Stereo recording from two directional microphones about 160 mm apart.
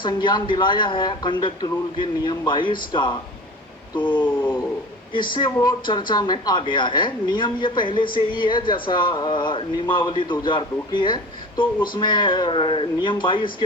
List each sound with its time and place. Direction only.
0.0 s a woman's voice: 30° left (ahead or behind)
4.4 s dog: 15° left (ahead or behind)
5.3 s a woman's voice: 30° left (ahead or behind)